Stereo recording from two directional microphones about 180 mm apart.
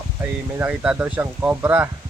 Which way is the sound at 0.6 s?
5° right (ahead or behind).